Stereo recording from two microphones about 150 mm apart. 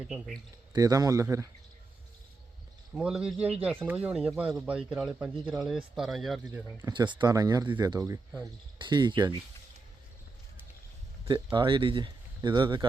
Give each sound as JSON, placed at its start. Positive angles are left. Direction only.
{"t": 0.7, "sound": "speech", "side_deg": -25}
{"t": 2.9, "sound": "speech", "side_deg": -5}
{"t": 6.5, "sound": "speech", "side_deg": -15}
{"t": 6.9, "sound": "speech", "side_deg": -30}
{"t": 11.5, "sound": "speech", "side_deg": -30}